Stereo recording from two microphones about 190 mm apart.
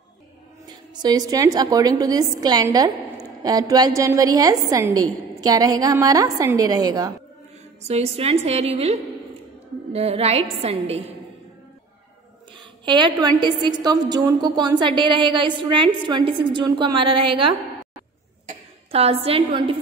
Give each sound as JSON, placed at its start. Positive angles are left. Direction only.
{"t": 0.7, "sound": "a woman's voice", "side_deg": -20}
{"t": 7.8, "sound": "a woman's voice", "side_deg": -35}
{"t": 9.9, "sound": "a woman's voice", "side_deg": -30}
{"t": 12.8, "sound": "a woman's voice", "side_deg": -25}
{"t": 18.5, "sound": "speech", "side_deg": -30}